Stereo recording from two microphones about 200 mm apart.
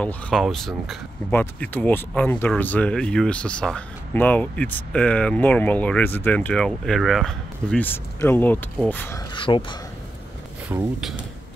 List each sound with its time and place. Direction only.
0.0 s speech: centre (ahead or behind)
9.3 s speech: 25° left (ahead or behind)
10.7 s speech: centre (ahead or behind)